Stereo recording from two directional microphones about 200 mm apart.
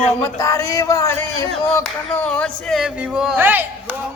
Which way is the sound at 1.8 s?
5° left (ahead or behind).